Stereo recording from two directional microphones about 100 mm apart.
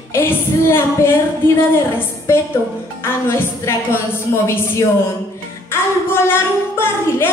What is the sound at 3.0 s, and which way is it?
A woman's voice, 20° left (ahead or behind).